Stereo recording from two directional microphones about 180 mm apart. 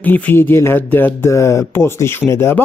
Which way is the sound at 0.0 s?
10° left (ahead or behind).